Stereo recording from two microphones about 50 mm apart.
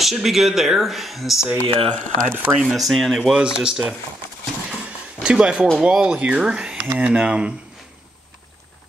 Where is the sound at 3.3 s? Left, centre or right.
Centre.